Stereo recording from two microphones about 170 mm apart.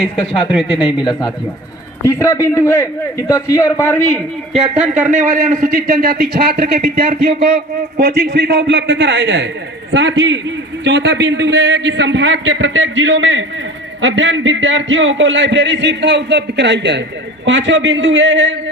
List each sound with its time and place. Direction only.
0.9 s a man's voice: 25° left (ahead or behind); by 4.2 s 10° left (ahead or behind)
4.5 s speech: 5° right (ahead or behind)
5.1 s a man's voice: 50° right (ahead or behind)
7.4 s a man's voice: 70° right (ahead or behind); by 18.5 s 90° right